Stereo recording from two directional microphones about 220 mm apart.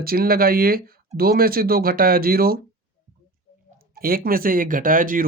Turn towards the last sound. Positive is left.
turn(degrees=-40)  # may be behind; listen again after turning